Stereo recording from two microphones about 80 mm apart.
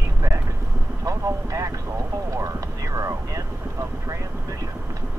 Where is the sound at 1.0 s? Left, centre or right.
Right.